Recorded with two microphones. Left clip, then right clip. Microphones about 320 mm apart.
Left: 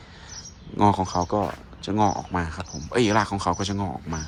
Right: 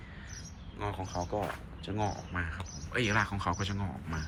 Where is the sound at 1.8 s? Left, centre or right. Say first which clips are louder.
Left 13 dB; centre.